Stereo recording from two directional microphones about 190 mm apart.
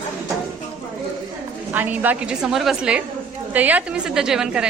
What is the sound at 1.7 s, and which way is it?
A woman's voice, 10° right (ahead or behind).